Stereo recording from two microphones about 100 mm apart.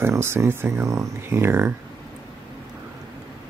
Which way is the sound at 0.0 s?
25° right (ahead or behind).